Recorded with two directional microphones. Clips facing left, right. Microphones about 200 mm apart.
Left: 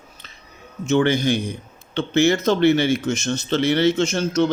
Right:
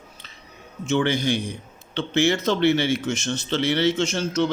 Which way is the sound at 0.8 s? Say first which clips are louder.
Left 4 dB; 45° left (ahead or behind).